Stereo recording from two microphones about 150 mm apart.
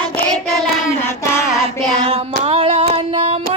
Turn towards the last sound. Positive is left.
turn(degrees=-45)  # may be behind; listen again after turning